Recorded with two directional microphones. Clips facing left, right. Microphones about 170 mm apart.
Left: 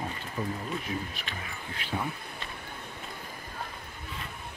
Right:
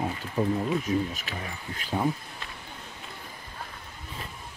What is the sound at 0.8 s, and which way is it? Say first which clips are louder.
Speech: right 8 dB; 45° right (ahead or behind).